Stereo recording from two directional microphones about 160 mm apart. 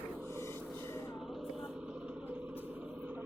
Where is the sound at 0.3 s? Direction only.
15° left (ahead or behind).